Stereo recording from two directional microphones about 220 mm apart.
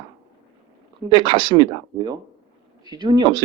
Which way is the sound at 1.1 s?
20° right (ahead or behind).